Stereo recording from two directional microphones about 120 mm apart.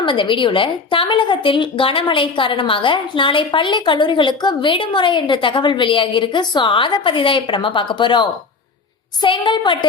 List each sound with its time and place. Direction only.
0.0 s a woman's voice: 45° left (ahead or behind)